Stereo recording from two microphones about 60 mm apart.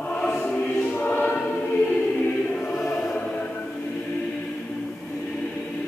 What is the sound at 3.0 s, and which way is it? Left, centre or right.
Music, centre.